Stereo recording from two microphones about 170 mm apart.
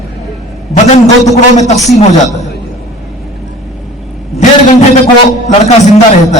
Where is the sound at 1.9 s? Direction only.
40° left (ahead or behind).